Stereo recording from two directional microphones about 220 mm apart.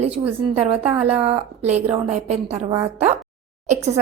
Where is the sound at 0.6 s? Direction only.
25° right (ahead or behind).